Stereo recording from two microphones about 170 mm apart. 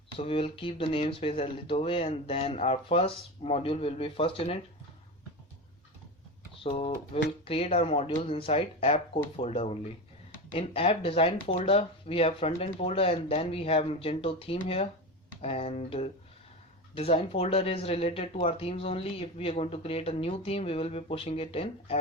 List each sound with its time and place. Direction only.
0.2 s speech: 35° left (ahead or behind)
6.6 s speech: 35° left (ahead or behind)